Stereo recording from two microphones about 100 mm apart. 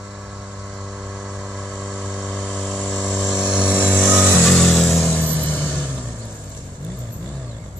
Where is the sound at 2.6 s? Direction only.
5° right (ahead or behind).